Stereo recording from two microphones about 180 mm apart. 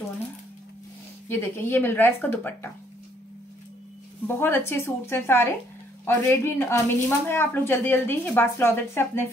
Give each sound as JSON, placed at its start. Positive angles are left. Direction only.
{"t": 1.4, "sound": "speech", "side_deg": 10}
{"t": 4.3, "sound": "speech", "side_deg": 10}